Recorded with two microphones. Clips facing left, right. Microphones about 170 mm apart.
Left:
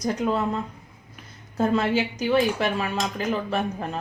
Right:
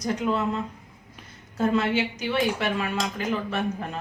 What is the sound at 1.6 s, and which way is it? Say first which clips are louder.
Speech: left 1 dB; 35° left (ahead or behind).